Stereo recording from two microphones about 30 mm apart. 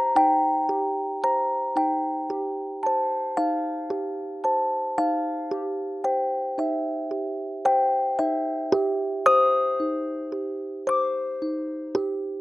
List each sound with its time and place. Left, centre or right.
0.0 s music: centre
3.3 s music: centre
10.9 s music: centre